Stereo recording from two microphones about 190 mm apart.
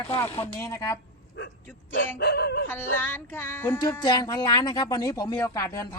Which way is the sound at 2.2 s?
60° left (ahead or behind).